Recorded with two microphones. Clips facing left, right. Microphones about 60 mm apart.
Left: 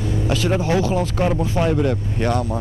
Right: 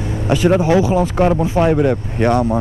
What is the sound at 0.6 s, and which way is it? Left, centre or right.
Speech, centre.